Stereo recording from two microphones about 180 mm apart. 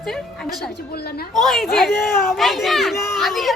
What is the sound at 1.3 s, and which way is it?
Speech, centre (ahead or behind).